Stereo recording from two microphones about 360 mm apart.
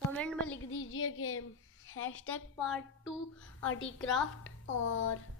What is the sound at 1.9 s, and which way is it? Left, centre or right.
Speech, left.